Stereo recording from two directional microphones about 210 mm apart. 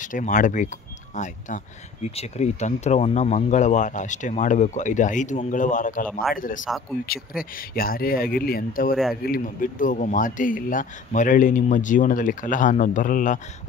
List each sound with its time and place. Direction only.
0.0 s speech: 40° left (ahead or behind)